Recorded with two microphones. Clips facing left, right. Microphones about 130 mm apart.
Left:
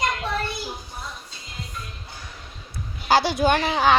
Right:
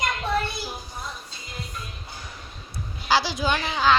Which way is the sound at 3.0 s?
55° left (ahead or behind).